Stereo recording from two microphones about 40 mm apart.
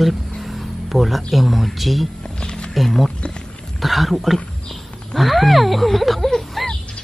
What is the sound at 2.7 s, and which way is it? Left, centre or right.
Speech, centre.